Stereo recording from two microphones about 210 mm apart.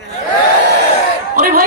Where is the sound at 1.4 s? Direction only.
40° right (ahead or behind).